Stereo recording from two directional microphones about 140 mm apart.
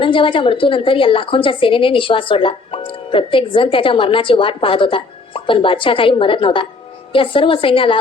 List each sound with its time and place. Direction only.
0.0 s a woman's voice: 40° left (ahead or behind)